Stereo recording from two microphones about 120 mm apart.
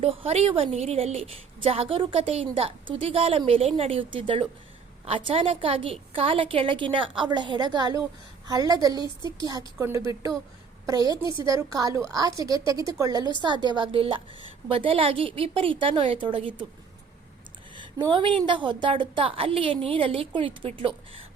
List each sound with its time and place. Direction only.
0.0 s a woman's voice: 55° right (ahead or behind)
17.7 s a woman's voice: 40° right (ahead or behind)